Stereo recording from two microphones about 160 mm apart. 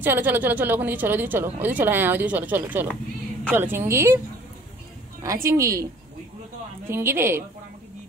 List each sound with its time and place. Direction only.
0.0 s speech: 10° right (ahead or behind)
5.2 s a woman's voice: 20° right (ahead or behind)
6.9 s speech: 15° right (ahead or behind)